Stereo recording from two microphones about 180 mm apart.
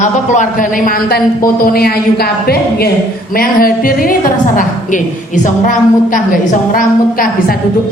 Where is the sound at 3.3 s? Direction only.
55° left (ahead or behind).